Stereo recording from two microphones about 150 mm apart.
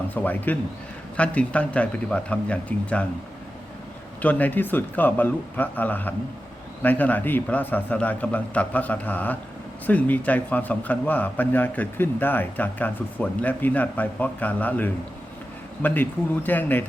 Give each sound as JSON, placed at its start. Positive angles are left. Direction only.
{"t": 0.1, "sound": "a man's voice", "side_deg": 10}
{"t": 4.2, "sound": "a man's voice", "side_deg": 10}